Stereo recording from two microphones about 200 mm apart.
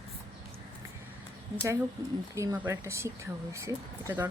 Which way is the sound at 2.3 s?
10° right (ahead or behind).